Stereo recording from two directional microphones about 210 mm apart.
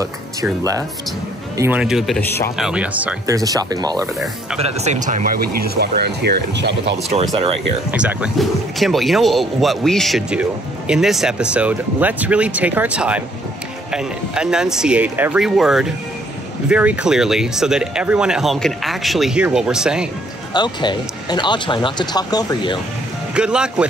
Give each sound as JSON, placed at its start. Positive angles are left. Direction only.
{"t": 0.0, "sound": "speech", "side_deg": -15}
{"t": 1.6, "sound": "speech", "side_deg": -5}
{"t": 4.6, "sound": "speech", "side_deg": -30}
{"t": 7.9, "sound": "speech", "side_deg": -5}
{"t": 20.5, "sound": "speech", "side_deg": 20}
{"t": 23.3, "sound": "speech", "side_deg": -5}